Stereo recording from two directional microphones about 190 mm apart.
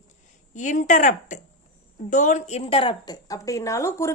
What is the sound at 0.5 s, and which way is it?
A woman's voice, 40° left (ahead or behind).